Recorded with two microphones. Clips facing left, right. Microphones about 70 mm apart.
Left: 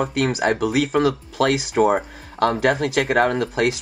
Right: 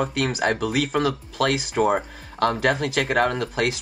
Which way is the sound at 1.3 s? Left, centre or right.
Left.